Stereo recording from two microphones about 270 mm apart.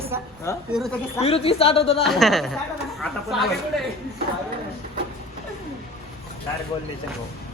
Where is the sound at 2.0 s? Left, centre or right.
Centre.